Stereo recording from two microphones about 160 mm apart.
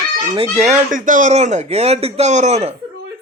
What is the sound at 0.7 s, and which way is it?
A man's voice, 55° right (ahead or behind).